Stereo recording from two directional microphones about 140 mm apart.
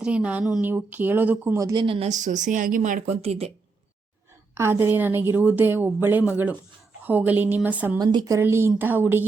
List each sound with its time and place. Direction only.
0.0 s a woman's voice: 10° right (ahead or behind)
1.5 s a woman's voice: 25° right (ahead or behind)
2.0 s speech: 60° right (ahead or behind)
3.2 s speech: 45° right (ahead or behind)
4.5 s a woman's voice: 20° right (ahead or behind)
7.9 s a woman's voice: 30° right (ahead or behind)
8.4 s a woman's voice: 15° right (ahead or behind)